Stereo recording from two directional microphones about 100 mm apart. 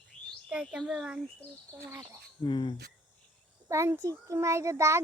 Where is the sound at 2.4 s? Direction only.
50° left (ahead or behind).